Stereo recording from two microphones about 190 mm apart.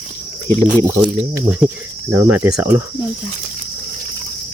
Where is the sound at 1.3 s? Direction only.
5° right (ahead or behind).